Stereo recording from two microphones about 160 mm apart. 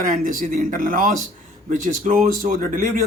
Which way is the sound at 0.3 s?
60° right (ahead or behind).